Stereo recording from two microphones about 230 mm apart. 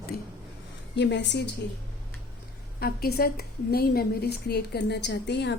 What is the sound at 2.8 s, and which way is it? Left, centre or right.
A woman's voice, left.